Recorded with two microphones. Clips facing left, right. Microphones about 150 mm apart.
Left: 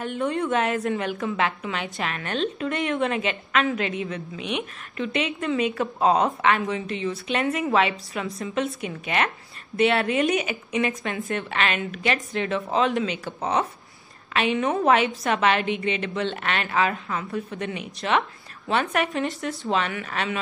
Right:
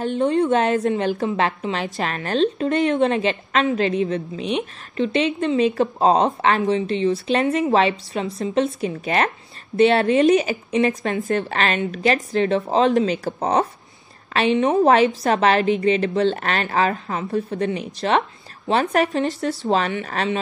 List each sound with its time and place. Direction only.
0.0 s a woman's voice: 30° right (ahead or behind)